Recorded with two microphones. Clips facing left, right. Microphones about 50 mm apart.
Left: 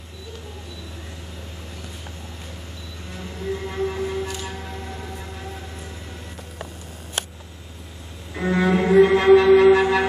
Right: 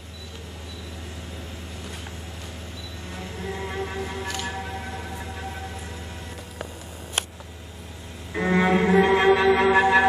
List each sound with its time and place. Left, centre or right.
3.6 s a sound: centre
8.4 s cello: centre
8.7 s music: centre
9.7 s wind instrument: centre